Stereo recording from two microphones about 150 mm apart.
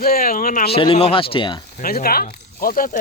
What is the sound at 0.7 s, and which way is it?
Speech, 35° left (ahead or behind).